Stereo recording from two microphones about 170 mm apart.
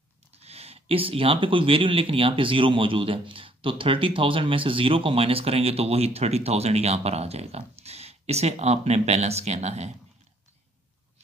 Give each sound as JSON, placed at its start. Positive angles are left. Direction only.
{"t": 0.3, "sound": "speech", "side_deg": -35}